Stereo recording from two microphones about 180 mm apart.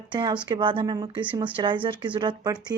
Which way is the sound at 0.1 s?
25° right (ahead or behind).